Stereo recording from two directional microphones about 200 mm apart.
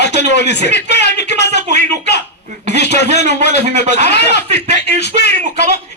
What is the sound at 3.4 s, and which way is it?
A man's voice, 55° left (ahead or behind).